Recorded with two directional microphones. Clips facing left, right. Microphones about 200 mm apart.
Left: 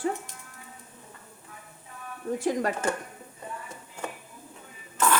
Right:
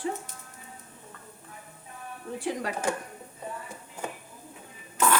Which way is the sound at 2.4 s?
45° left (ahead or behind).